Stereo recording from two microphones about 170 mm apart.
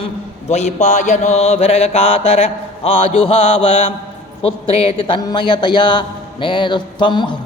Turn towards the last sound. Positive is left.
turn(degrees=25)  # may be behind; listen again after turning